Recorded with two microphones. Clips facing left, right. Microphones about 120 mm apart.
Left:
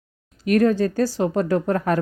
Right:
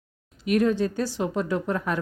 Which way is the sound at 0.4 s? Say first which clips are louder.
Left 4 dB; 45° left (ahead or behind).